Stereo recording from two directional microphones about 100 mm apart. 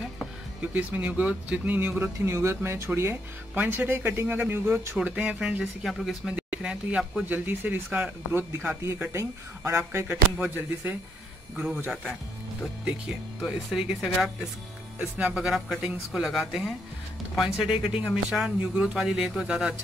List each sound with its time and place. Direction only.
0.7 s speech: 15° right (ahead or behind)
4.9 s speech: 10° right (ahead or behind)
11.5 s speech: 10° right (ahead or behind)
18.3 s speech: 10° right (ahead or behind)